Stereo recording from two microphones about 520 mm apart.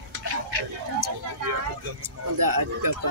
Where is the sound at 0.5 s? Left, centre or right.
Right.